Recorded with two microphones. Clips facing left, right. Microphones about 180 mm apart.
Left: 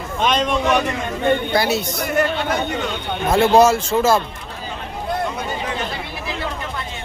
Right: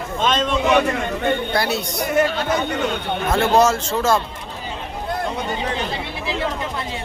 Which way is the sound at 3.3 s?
10° left (ahead or behind).